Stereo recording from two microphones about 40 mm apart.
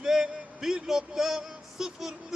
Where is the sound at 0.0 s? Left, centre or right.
Centre.